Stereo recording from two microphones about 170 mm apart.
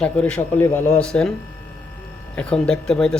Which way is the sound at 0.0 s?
5° left (ahead or behind).